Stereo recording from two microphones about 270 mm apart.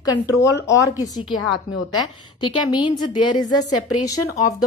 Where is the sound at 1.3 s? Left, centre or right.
Left.